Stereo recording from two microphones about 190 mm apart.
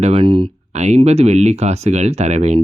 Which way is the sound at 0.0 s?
30° right (ahead or behind).